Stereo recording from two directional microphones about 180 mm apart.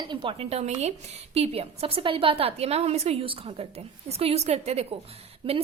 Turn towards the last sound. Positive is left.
turn(degrees=-35)  # may be behind; listen again after turning